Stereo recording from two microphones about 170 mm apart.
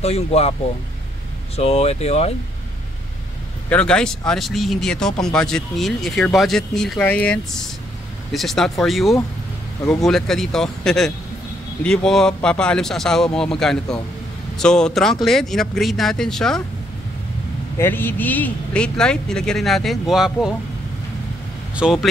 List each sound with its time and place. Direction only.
0.0 s speech: 35° left (ahead or behind)
1.6 s speech: 35° left (ahead or behind)
3.6 s speech: 5° left (ahead or behind)
17.7 s speech: 15° left (ahead or behind)
21.7 s speech: 5° right (ahead or behind)